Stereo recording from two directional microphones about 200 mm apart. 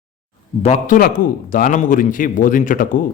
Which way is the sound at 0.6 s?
35° left (ahead or behind).